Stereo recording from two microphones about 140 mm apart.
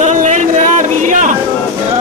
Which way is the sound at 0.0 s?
65° right (ahead or behind).